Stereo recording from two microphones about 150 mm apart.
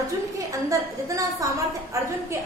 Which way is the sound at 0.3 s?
20° right (ahead or behind).